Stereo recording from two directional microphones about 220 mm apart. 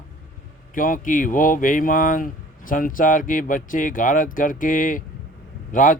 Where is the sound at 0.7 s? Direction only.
40° left (ahead or behind).